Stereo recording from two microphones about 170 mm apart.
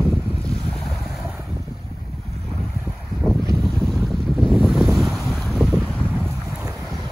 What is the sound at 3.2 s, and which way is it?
Boat, centre (ahead or behind).